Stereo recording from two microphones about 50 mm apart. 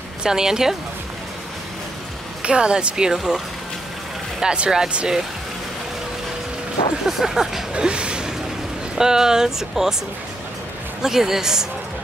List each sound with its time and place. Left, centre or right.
0.2 s speech: centre
2.4 s speech: centre
7.1 s speech: centre
7.7 s a sound: centre
8.9 s speech: centre
11.0 s speech: centre